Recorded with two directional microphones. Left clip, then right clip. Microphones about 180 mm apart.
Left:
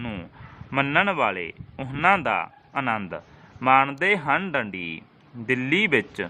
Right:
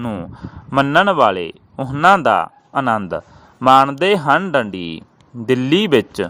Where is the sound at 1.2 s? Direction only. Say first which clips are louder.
Right 10 dB; 55° right (ahead or behind).